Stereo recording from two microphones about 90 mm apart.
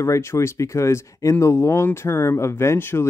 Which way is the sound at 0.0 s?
35° left (ahead or behind).